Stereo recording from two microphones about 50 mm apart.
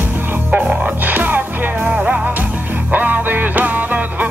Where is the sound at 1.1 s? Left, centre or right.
Right.